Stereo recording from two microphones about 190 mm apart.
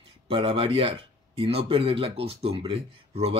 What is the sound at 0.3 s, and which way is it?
Speech, 25° right (ahead or behind).